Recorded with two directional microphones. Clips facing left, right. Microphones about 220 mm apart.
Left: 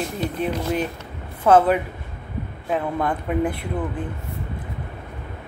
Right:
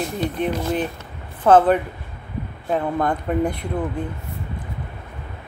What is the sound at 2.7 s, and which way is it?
Speech, 40° right (ahead or behind).